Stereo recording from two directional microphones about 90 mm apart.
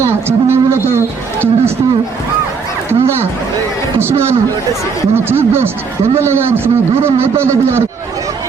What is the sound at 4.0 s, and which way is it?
A man's voice, 30° right (ahead or behind).